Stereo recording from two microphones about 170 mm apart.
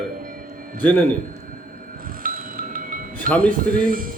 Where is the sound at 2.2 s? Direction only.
55° right (ahead or behind).